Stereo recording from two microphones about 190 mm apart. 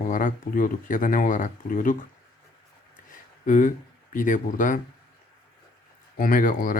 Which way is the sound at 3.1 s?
40° left (ahead or behind).